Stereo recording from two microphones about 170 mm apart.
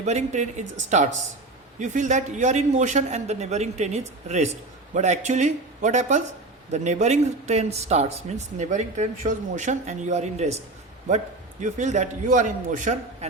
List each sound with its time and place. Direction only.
0.0 s a man's voice: 45° right (ahead or behind)
11.6 s a man's voice: 45° right (ahead or behind)